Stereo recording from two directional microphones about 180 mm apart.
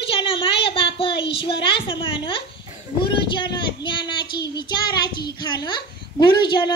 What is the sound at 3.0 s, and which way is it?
Child singing, 25° left (ahead or behind).